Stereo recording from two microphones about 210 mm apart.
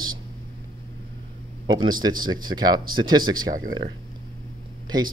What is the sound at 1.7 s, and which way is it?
Speech, 20° right (ahead or behind).